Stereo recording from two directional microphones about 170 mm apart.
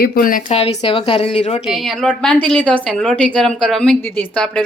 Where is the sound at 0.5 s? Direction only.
35° left (ahead or behind).